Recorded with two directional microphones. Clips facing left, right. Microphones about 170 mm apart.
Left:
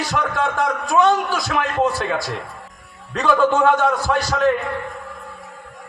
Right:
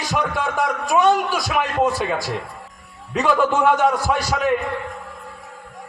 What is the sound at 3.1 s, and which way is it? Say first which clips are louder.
A man's voice: left 2 dB; 10° right (ahead or behind).